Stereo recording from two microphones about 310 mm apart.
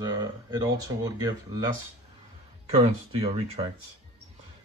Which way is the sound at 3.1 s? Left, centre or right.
Centre.